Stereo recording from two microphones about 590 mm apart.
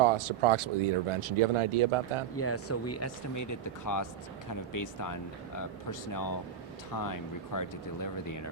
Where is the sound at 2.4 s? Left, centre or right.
Left.